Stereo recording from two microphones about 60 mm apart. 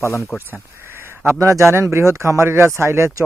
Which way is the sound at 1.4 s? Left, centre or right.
Right.